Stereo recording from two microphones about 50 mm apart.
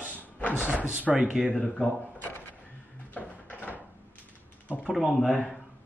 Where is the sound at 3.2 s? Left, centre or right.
Left.